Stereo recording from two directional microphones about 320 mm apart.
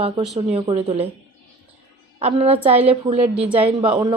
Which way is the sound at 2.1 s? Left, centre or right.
Centre.